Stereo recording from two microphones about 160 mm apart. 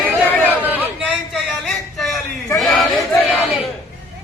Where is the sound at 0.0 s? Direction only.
10° right (ahead or behind).